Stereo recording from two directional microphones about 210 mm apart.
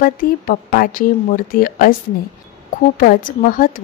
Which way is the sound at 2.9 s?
40° left (ahead or behind).